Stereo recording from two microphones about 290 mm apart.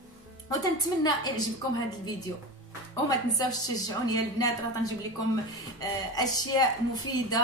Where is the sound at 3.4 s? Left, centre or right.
Centre.